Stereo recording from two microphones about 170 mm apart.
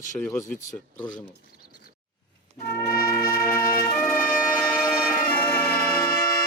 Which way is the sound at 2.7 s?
15° left (ahead or behind).